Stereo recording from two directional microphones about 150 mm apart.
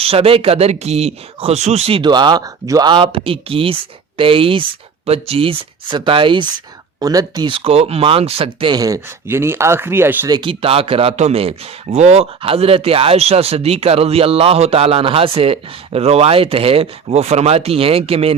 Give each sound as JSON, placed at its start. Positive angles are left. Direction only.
{"t": 0.0, "sound": "speech", "side_deg": -40}
{"t": 10.2, "sound": "speech", "side_deg": -30}